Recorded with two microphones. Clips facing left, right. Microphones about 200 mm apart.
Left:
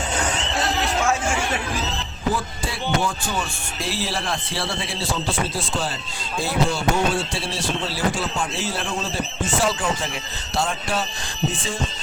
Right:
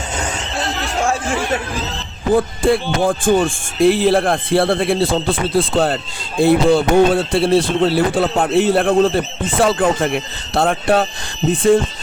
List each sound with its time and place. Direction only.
2.3 s speech: 55° right (ahead or behind)